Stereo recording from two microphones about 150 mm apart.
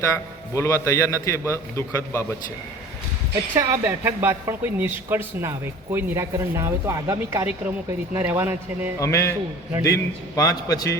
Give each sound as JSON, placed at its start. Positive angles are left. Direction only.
{"t": 0.5, "sound": "a man's voice", "side_deg": 20}
{"t": 3.5, "sound": "speech", "side_deg": -25}
{"t": 3.8, "sound": "speech", "side_deg": -15}
{"t": 9.0, "sound": "a man's voice", "side_deg": 20}